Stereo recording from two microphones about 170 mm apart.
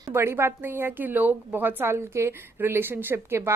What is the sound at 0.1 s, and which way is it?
A woman's voice, 15° right (ahead or behind).